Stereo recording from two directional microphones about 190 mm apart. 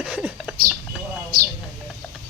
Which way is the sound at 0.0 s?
5° right (ahead or behind).